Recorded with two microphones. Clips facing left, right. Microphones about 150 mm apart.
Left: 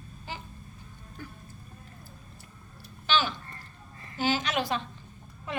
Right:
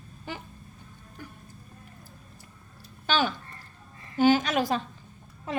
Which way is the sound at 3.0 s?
45° right (ahead or behind).